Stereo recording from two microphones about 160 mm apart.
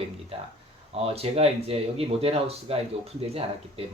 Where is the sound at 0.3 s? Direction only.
40° right (ahead or behind).